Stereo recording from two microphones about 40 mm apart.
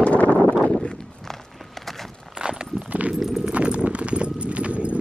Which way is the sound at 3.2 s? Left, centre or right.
Centre.